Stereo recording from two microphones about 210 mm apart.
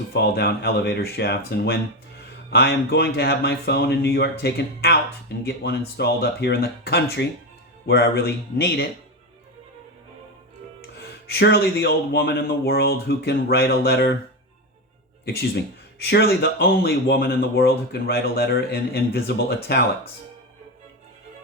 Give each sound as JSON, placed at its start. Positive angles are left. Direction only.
{"t": 0.1, "sound": "speech", "side_deg": 50}
{"t": 11.0, "sound": "speech", "side_deg": 50}
{"t": 15.2, "sound": "speech", "side_deg": 50}